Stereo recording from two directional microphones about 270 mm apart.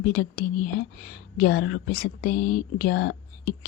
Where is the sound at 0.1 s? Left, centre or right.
Left.